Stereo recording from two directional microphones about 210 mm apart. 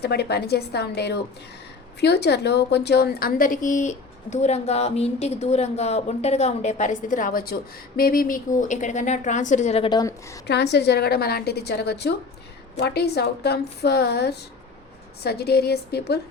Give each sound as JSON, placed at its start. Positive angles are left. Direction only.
{"t": 0.0, "sound": "a woman's voice", "side_deg": 50}
{"t": 10.4, "sound": "a woman's voice", "side_deg": 55}